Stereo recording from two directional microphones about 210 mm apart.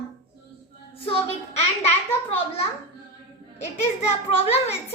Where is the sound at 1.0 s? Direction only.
25° left (ahead or behind).